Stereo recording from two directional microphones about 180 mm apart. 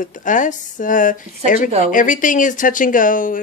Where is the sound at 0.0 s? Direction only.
45° left (ahead or behind).